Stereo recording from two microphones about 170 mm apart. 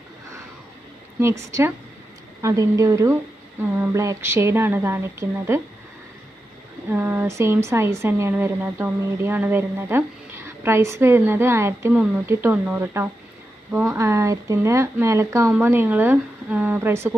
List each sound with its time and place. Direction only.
1.2 s speech: 15° right (ahead or behind)
6.9 s speech: 10° right (ahead or behind)
13.9 s speech: 15° right (ahead or behind)